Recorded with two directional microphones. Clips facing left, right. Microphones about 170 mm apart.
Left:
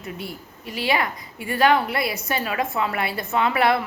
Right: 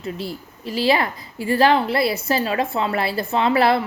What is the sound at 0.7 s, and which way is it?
A woman's voice, 30° right (ahead or behind).